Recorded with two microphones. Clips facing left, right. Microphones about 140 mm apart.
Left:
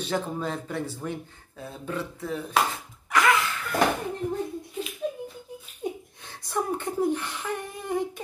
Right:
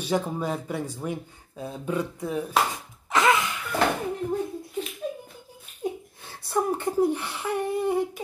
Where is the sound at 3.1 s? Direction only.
25° right (ahead or behind).